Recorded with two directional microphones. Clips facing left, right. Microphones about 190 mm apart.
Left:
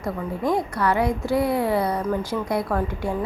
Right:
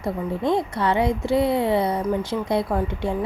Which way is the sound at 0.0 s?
25° right (ahead or behind).